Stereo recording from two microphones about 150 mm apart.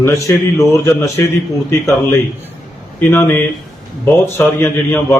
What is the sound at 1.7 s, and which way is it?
Mantra, 15° left (ahead or behind).